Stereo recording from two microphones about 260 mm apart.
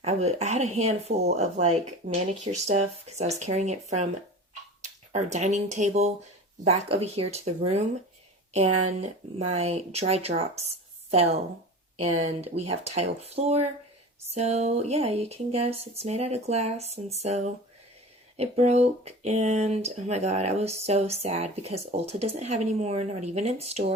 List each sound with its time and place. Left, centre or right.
0.0 s speech: right
9.0 s speech: right